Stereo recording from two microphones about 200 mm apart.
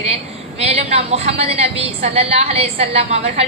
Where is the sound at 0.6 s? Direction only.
30° right (ahead or behind).